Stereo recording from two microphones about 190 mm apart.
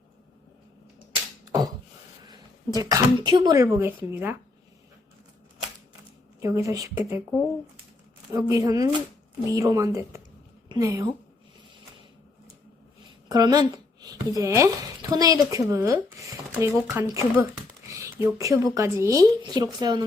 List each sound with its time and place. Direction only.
1.5 s a sound: 20° right (ahead or behind)
2.2 s speech: 20° right (ahead or behind)
6.4 s speech: 15° right (ahead or behind)
8.3 s a woman's voice: 20° right (ahead or behind)
13.2 s speech: 20° right (ahead or behind)